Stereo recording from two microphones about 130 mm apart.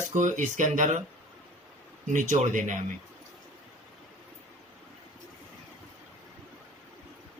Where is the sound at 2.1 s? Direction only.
70° right (ahead or behind).